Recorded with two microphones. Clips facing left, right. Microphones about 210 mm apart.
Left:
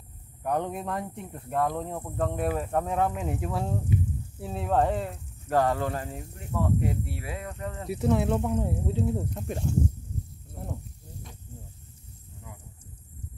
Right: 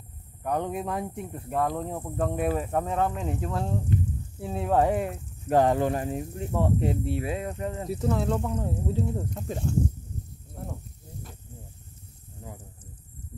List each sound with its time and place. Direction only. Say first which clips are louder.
0.4 s speech: right 1 dB; centre (ahead or behind); by 7.9 s 20° right (ahead or behind)
7.9 s speech: left 3 dB; 5° left (ahead or behind)
10.5 s snake: even; centre (ahead or behind)
12.5 s a sound: right 5 dB; 35° right (ahead or behind)